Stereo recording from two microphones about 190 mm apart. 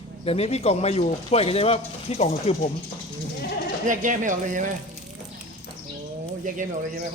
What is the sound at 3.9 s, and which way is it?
Speech, 45° right (ahead or behind).